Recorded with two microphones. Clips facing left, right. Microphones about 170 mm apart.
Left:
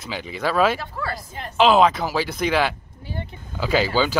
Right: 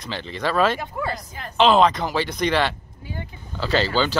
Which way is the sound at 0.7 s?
20° right (ahead or behind).